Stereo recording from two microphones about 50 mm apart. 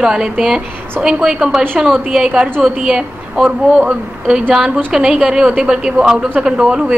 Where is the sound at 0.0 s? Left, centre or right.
Centre.